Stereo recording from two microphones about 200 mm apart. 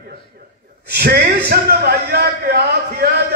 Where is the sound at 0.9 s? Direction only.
50° right (ahead or behind).